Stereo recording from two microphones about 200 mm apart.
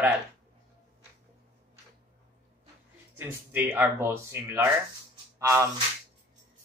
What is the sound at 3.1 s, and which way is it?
Speech, 10° right (ahead or behind).